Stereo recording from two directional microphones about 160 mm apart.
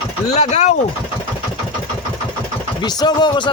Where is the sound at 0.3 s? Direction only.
45° left (ahead or behind).